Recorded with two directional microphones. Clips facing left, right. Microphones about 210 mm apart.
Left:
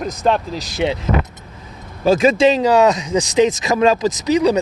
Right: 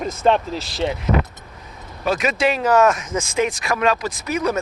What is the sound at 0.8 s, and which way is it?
Speech, 15° left (ahead or behind).